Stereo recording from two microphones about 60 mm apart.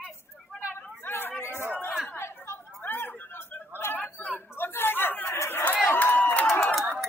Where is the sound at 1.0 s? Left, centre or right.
Left.